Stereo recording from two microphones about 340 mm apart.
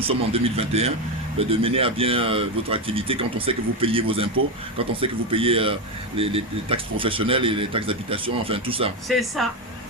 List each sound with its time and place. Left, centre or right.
0.3 s speech: centre
9.0 s speech: centre